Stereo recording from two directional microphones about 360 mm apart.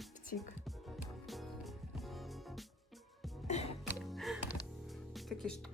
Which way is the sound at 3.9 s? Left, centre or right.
Centre.